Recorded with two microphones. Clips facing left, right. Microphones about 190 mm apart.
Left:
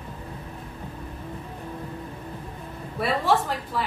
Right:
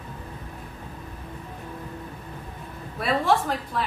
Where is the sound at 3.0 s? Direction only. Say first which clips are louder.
Even; centre (ahead or behind).